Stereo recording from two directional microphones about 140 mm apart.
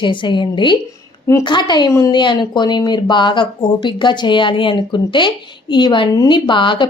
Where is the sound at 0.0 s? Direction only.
35° left (ahead or behind).